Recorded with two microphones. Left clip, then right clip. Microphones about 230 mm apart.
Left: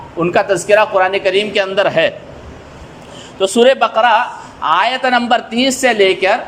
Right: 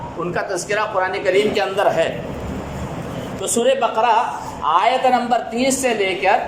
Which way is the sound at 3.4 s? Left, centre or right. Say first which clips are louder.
Left 7 dB; left.